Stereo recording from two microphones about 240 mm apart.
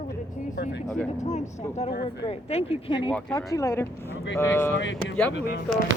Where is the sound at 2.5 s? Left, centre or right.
Left; by 4.7 s centre.